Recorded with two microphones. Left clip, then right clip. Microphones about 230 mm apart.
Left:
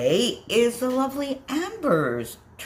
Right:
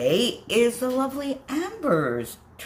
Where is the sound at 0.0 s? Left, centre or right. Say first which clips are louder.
Even; centre.